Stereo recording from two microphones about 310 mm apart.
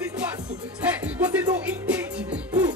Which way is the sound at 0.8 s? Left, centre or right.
Centre.